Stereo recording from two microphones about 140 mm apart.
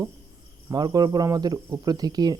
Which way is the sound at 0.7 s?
25° right (ahead or behind).